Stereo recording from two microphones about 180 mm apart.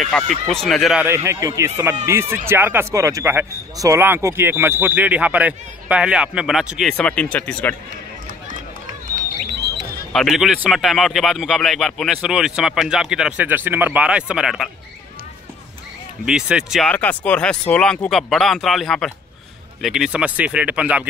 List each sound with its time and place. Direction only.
0.5 s a man's voice: centre (ahead or behind)
1.0 s speech: 15° right (ahead or behind); by 7.7 s 10° left (ahead or behind)
9.0 s a sound: 45° right (ahead or behind)
10.1 s a man's voice: centre (ahead or behind)
16.3 s a man's voice: 5° right (ahead or behind)